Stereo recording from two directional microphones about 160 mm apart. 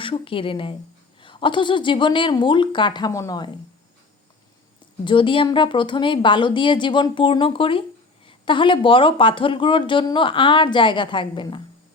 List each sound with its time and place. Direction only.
0.0 s speech: 35° left (ahead or behind)
5.0 s speech: 30° left (ahead or behind)